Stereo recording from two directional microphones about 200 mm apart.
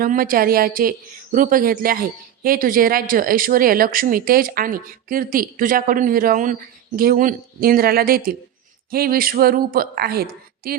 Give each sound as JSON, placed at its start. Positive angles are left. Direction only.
{"t": 0.0, "sound": "speech", "side_deg": -45}